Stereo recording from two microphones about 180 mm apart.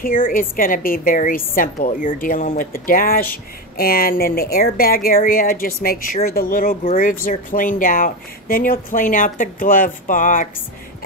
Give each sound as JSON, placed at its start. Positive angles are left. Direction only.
{"t": 0.0, "sound": "speech", "side_deg": 50}